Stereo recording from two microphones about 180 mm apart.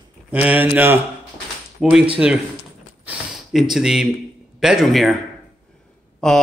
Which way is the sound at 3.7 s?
5° right (ahead or behind).